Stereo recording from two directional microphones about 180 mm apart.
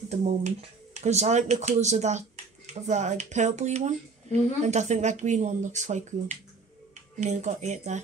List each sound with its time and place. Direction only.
0.1 s speech: 40° right (ahead or behind)